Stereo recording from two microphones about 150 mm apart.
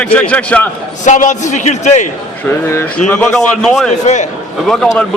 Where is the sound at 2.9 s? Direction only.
10° left (ahead or behind).